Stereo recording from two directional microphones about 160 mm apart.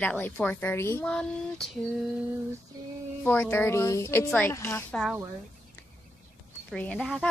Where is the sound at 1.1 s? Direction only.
5° left (ahead or behind).